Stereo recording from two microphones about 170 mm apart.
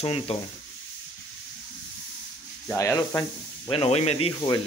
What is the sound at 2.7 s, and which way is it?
Speech, 15° left (ahead or behind).